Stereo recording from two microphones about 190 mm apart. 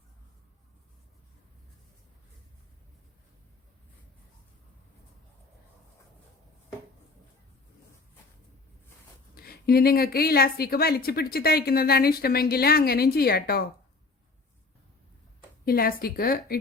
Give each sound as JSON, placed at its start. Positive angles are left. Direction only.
{"t": 9.3, "sound": "a woman's voice", "side_deg": 55}
{"t": 15.6, "sound": "a woman's voice", "side_deg": 50}